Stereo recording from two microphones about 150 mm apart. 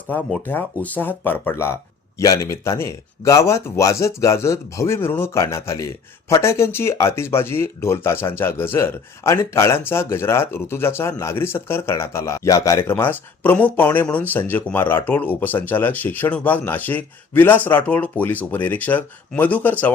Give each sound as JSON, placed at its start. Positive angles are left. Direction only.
{"t": 0.4, "sound": "speech", "side_deg": 10}